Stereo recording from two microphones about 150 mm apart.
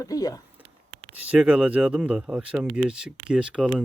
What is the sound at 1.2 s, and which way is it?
Speech, 10° right (ahead or behind).